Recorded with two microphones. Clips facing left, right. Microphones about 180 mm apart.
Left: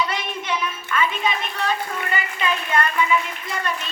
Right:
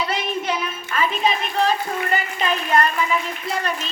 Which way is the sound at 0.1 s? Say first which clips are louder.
Right 3 dB; 35° right (ahead or behind).